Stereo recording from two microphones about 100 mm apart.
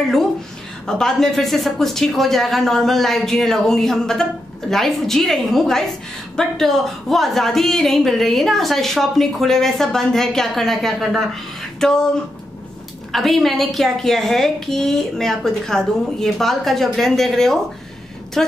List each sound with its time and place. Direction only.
0.8 s speech: 5° left (ahead or behind)
13.1 s speech: centre (ahead or behind)